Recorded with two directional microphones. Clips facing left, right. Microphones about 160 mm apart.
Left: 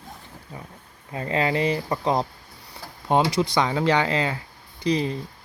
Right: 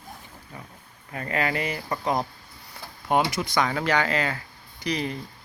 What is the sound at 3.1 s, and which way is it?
Speech, 25° left (ahead or behind).